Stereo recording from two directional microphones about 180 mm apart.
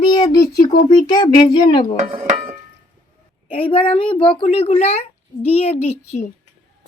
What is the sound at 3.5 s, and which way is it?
A child's voice, 30° left (ahead or behind).